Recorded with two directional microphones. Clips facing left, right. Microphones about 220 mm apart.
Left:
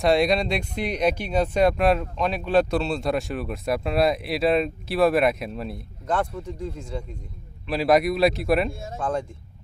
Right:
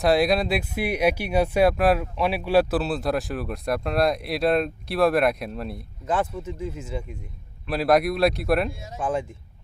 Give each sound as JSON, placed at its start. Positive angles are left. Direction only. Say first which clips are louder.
{"t": 0.0, "sound": "speech", "louder": "even", "side_deg": 0}
{"t": 8.7, "sound": "speech", "louder": "left 4 dB", "side_deg": 50}
{"t": 9.0, "sound": "speech", "louder": "right 1 dB", "side_deg": -5}